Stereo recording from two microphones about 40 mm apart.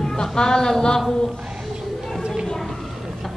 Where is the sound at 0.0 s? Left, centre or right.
Centre.